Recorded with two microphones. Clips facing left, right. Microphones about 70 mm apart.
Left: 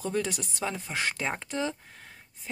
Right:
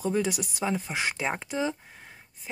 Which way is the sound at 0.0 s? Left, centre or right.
Centre.